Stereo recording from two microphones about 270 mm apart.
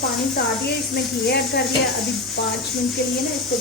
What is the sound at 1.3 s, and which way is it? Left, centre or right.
Speech, left.